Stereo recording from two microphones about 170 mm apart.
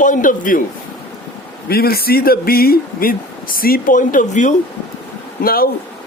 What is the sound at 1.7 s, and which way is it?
Speech, 65° left (ahead or behind).